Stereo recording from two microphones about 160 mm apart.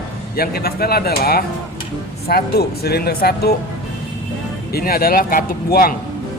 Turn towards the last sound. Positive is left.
turn(degrees=70)  # may be behind; listen again after turning